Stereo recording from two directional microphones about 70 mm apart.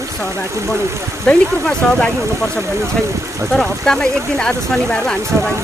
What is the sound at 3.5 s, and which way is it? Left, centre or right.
Speech, centre.